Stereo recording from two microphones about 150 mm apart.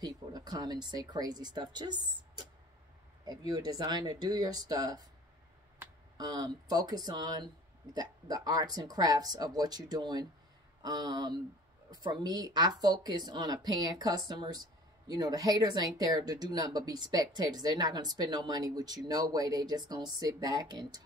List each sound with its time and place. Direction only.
0.0 s speech: 25° right (ahead or behind)